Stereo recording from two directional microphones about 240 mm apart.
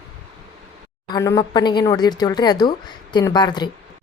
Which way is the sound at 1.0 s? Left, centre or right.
Centre.